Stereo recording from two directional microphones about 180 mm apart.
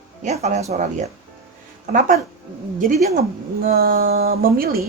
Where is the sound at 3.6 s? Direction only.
55° right (ahead or behind).